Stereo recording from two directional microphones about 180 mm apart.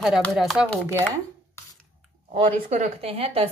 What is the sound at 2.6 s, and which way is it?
Speech, 35° right (ahead or behind).